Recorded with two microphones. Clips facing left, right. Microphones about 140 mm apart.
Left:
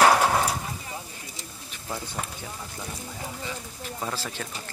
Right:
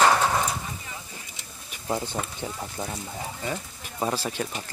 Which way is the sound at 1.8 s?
30° right (ahead or behind).